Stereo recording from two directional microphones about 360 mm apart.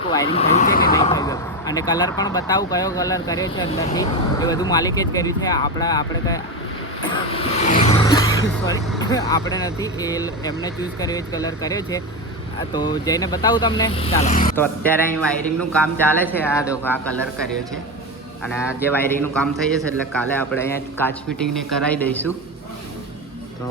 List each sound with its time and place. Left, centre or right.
0.1 s speech: centre
0.4 s vehicle: left
0.9 s speech: centre
7.3 s vehicle: centre
9.0 s speech: centre
14.5 s a man's voice: centre